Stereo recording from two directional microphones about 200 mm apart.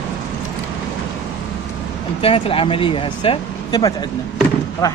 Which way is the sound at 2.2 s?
25° left (ahead or behind).